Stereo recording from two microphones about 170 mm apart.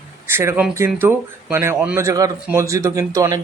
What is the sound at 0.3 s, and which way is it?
Speech, 15° right (ahead or behind).